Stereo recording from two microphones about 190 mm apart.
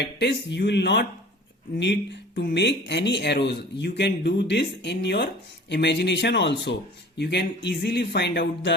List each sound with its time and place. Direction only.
0.0 s speech: 65° left (ahead or behind)